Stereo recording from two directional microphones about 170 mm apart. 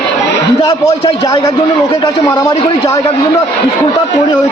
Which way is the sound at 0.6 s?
20° left (ahead or behind).